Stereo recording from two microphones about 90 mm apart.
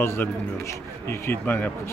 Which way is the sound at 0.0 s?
30° left (ahead or behind).